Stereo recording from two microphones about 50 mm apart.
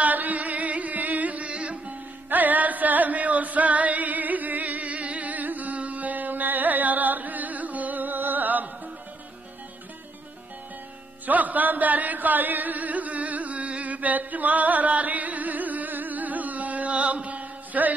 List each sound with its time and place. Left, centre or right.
0.0 s carnatic music: right
2.2 s music: right
11.2 s chant: right